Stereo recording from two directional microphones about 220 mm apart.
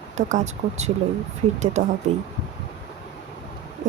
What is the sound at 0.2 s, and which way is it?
Speech, 35° right (ahead or behind).